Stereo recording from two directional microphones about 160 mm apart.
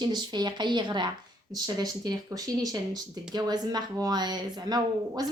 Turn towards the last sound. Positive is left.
turn(degrees=-25)  # may be behind; listen again after turning